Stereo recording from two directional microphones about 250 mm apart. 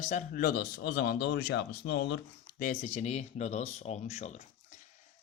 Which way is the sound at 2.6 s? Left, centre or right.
Left.